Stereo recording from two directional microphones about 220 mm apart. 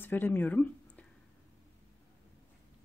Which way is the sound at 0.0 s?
10° left (ahead or behind).